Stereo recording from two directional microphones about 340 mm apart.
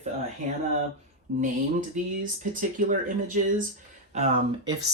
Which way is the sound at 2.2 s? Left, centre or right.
Right.